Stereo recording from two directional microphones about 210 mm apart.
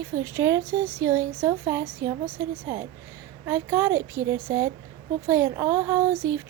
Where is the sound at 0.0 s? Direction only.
10° right (ahead or behind).